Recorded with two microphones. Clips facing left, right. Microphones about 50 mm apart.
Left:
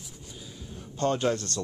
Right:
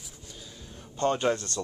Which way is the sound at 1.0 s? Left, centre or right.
Centre.